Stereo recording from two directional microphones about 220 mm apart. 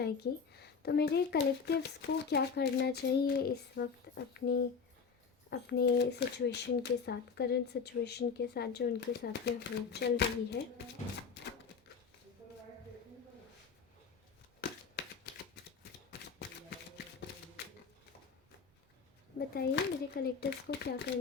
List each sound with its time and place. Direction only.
0.0 s a child's voice: 45° left (ahead or behind)
19.4 s a child's voice: 45° left (ahead or behind)